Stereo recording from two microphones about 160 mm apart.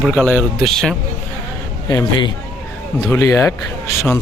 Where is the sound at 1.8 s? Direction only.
25° left (ahead or behind).